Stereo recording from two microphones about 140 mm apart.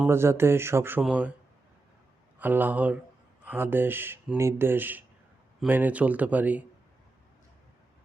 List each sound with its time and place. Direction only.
0.1 s speech: 15° right (ahead or behind)
2.4 s speech: 15° right (ahead or behind)